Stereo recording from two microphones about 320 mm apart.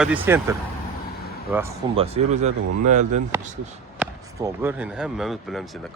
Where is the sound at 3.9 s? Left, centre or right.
Centre.